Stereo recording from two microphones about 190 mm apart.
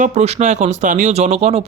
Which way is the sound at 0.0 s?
40° right (ahead or behind).